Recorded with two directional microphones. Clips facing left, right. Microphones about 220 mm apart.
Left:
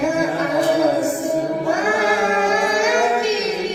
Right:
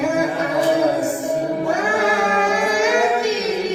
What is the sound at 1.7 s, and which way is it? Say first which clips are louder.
Child singing: left 1 dB; centre (ahead or behind).